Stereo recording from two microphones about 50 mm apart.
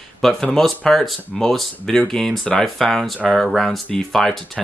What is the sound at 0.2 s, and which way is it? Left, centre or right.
Speech, centre.